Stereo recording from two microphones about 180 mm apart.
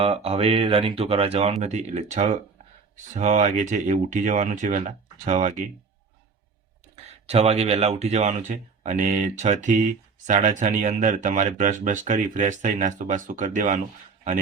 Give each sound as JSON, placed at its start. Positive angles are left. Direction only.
{"t": 0.0, "sound": "speech", "side_deg": -30}
{"t": 6.9, "sound": "speech", "side_deg": -35}